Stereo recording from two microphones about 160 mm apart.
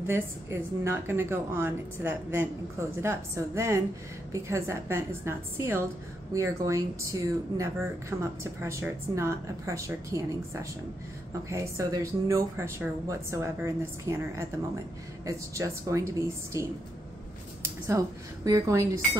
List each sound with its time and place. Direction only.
0.0 s speech: 15° right (ahead or behind)